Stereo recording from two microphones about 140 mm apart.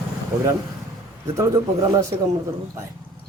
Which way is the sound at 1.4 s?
25° right (ahead or behind).